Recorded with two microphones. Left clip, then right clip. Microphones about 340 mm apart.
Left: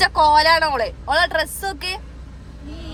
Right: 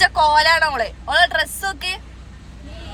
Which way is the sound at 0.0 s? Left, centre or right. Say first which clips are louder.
Even; centre.